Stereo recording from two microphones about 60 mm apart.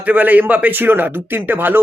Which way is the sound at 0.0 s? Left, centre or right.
Right.